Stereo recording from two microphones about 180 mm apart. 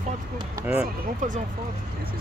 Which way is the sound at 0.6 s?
20° right (ahead or behind).